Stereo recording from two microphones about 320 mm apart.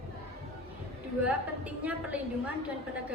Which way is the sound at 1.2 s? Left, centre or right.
Centre.